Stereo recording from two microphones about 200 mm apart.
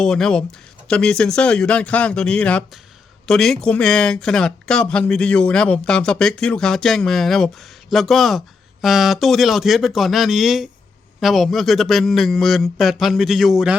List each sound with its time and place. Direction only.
0.0 s speech: 5° left (ahead or behind)